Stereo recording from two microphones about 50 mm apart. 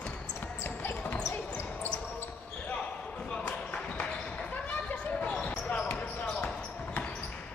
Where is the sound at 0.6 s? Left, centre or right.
Left.